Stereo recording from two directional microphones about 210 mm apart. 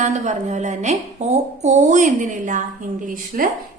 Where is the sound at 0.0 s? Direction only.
35° right (ahead or behind).